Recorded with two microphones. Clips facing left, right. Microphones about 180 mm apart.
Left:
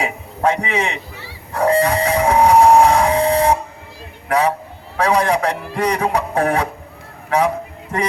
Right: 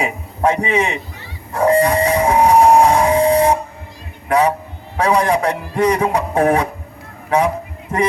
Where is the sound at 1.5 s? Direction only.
25° right (ahead or behind).